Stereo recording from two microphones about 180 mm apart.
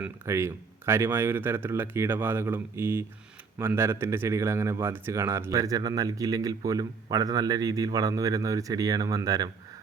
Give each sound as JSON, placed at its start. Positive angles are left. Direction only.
{"t": 0.0, "sound": "speech", "side_deg": -15}